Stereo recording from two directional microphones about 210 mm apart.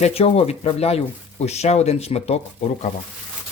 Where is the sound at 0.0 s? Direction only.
30° left (ahead or behind).